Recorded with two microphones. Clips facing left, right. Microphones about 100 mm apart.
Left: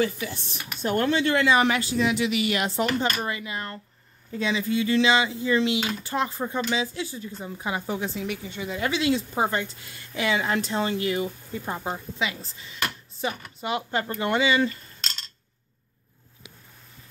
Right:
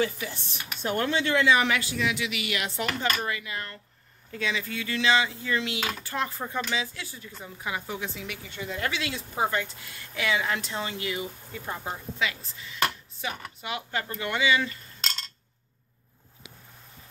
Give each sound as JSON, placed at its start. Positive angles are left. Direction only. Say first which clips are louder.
{"t": 0.0, "sound": "a woman's voice", "louder": "left 2 dB", "side_deg": 45}
{"t": 8.5, "sound": "speech", "louder": "right 1 dB", "side_deg": 15}
{"t": 8.9, "sound": "a woman's voice", "louder": "left 8 dB", "side_deg": 25}
{"t": 11.6, "sound": "a woman's voice", "louder": "left 3 dB", "side_deg": 25}